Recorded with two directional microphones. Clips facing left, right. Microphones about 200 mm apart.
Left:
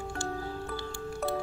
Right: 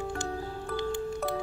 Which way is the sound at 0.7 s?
20° right (ahead or behind).